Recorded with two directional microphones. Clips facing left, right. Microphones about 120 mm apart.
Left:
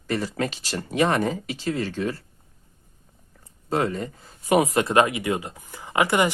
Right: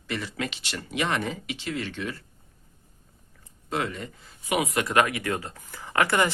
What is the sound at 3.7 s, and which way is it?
Speech, 40° left (ahead or behind).